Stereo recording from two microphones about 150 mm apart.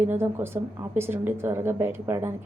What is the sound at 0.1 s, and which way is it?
A woman's voice, 15° right (ahead or behind).